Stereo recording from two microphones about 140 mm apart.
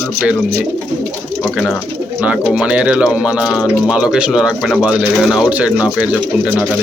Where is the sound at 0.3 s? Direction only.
10° right (ahead or behind).